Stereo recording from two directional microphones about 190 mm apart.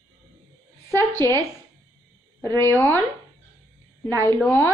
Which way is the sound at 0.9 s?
15° left (ahead or behind).